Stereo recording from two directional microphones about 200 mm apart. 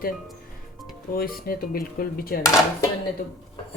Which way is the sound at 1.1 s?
45° left (ahead or behind).